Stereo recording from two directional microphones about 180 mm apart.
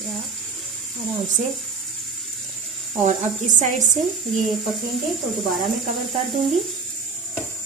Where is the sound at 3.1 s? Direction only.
45° right (ahead or behind).